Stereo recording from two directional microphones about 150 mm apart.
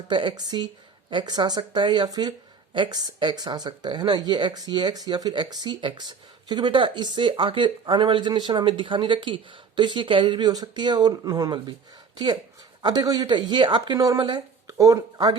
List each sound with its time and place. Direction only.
0.1 s speech: 30° right (ahead or behind)
12.8 s speech: 25° right (ahead or behind)